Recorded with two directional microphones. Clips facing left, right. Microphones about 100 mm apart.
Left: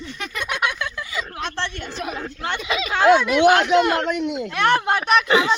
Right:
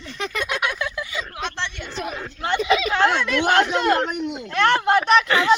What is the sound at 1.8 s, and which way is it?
Speech, centre (ahead or behind).